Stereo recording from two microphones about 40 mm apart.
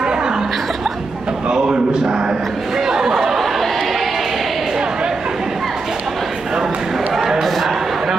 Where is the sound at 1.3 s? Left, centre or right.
Centre.